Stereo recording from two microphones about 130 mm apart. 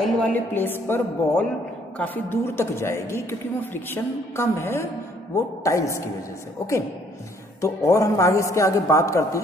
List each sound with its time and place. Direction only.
0.0 s a woman's voice: 10° left (ahead or behind)
7.6 s a woman's voice: 25° left (ahead or behind)